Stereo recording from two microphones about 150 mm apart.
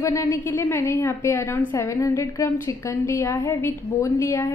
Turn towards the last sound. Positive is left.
turn(degrees=20)  # may be behind; listen again after turning